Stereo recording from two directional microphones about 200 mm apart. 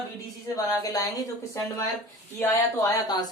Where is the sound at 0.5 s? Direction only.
15° left (ahead or behind).